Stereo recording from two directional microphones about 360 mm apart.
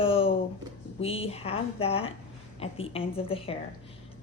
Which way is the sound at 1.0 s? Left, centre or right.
Centre.